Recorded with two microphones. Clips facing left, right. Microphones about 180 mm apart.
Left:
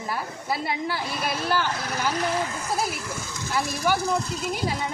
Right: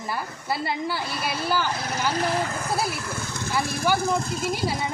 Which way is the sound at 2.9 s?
60° right (ahead or behind).